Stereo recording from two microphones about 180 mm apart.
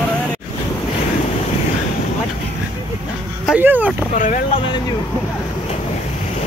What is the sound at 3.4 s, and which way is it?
Speech, 10° right (ahead or behind).